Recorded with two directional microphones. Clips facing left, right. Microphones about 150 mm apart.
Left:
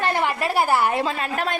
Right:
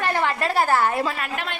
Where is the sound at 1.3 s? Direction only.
40° left (ahead or behind).